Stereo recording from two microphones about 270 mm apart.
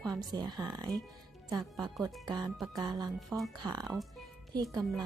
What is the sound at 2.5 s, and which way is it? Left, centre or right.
Speech, centre.